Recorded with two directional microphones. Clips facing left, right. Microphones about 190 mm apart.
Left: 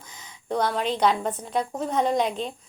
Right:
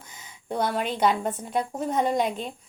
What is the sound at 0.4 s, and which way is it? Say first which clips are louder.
A woman's voice: left 2 dB; 5° right (ahead or behind).